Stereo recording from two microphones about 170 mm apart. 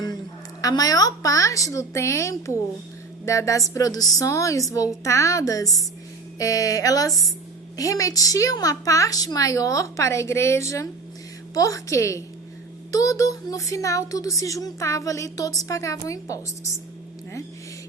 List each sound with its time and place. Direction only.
0.6 s a woman's voice: 20° left (ahead or behind)